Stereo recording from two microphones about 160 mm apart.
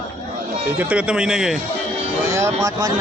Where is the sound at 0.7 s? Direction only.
5° right (ahead or behind).